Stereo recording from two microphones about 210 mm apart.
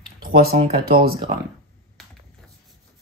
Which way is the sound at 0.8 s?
45° right (ahead or behind).